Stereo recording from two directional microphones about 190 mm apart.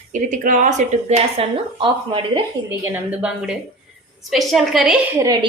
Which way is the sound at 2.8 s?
5° right (ahead or behind).